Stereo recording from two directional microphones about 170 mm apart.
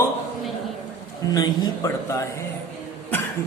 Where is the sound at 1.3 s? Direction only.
20° left (ahead or behind).